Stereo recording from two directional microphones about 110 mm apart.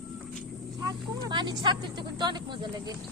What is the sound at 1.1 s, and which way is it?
Speech, 40° right (ahead or behind).